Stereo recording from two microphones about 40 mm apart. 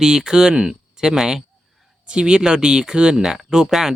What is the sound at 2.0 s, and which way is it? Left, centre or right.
Speech, right.